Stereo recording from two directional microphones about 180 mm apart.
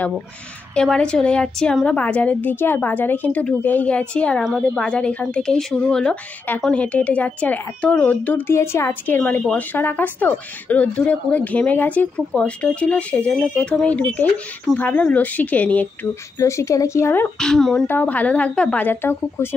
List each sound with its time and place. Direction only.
0.7 s a woman's voice: 5° left (ahead or behind)